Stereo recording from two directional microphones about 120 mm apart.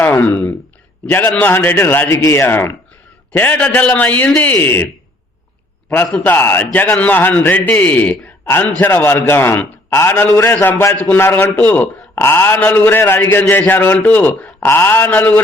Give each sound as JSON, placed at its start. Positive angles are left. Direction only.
{"t": 0.0, "sound": "a man's voice", "side_deg": 15}
{"t": 6.1, "sound": "a man's voice", "side_deg": 15}